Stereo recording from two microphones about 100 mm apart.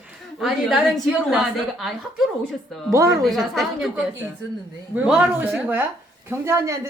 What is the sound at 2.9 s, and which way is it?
Speech, 30° right (ahead or behind).